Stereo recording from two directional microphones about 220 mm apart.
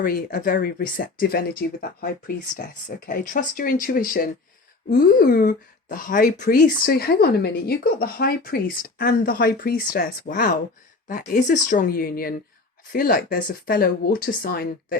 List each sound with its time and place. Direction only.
0.0 s speech: 40° left (ahead or behind)